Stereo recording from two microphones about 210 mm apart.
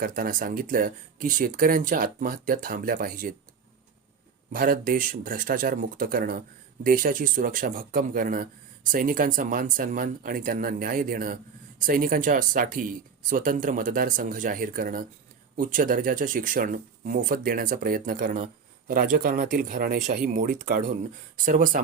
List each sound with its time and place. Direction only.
0.0 s speech: 40° right (ahead or behind)
4.5 s speech: 40° right (ahead or behind)